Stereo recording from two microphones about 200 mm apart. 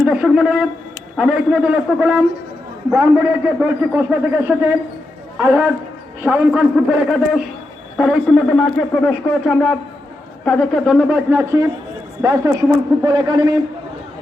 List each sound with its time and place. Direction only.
0.0 s a man's voice: 5° right (ahead or behind)
7.9 s speech: centre (ahead or behind)
11.3 s a man's voice: 15° right (ahead or behind)